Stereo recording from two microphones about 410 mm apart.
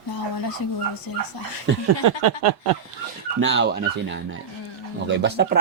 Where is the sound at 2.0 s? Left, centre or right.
Right.